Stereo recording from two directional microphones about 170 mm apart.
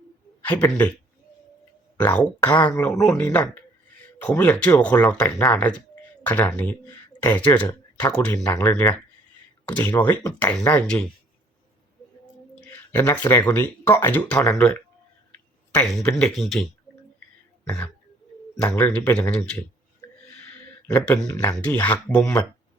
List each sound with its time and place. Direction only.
0.4 s speech: 10° left (ahead or behind)
2.1 s speech: 10° left (ahead or behind)
12.5 s speech: 10° left (ahead or behind)
18.6 s speech: 5° left (ahead or behind)
20.9 s speech: 5° left (ahead or behind)